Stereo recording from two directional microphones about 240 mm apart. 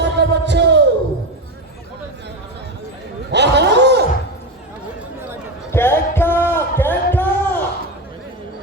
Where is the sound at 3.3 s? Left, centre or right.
Right.